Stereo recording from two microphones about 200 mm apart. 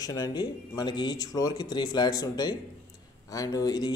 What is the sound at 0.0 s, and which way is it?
Speech, 20° left (ahead or behind).